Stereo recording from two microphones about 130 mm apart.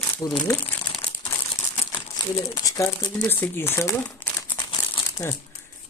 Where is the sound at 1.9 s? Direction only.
25° left (ahead or behind).